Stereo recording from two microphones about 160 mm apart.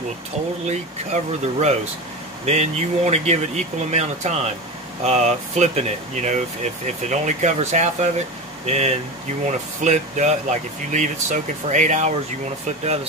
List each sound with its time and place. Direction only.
0.7 s speech: 45° right (ahead or behind)